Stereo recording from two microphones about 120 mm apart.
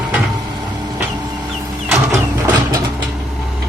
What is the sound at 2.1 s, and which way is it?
Printer, 30° right (ahead or behind).